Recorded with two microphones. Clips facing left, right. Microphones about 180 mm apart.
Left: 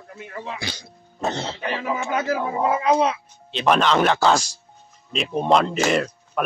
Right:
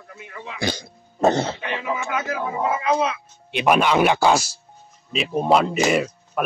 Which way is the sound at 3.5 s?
10° right (ahead or behind).